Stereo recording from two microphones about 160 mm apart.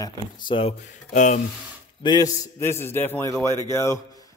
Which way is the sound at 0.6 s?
45° left (ahead or behind).